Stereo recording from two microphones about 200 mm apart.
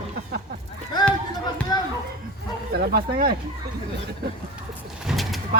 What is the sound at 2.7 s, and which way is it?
Speech, 50° right (ahead or behind).